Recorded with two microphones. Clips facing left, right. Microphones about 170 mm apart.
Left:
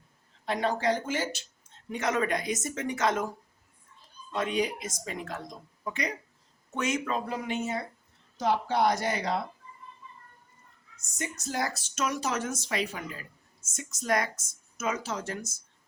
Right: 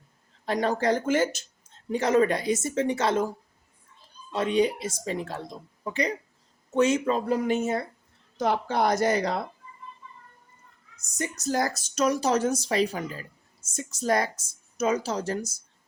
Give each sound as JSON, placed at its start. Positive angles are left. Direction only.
{"t": 0.4, "sound": "speech", "side_deg": -40}
{"t": 1.9, "sound": "speech", "side_deg": -30}
{"t": 4.4, "sound": "speech", "side_deg": -30}
{"t": 7.3, "sound": "speech", "side_deg": -45}
{"t": 11.1, "sound": "speech", "side_deg": -40}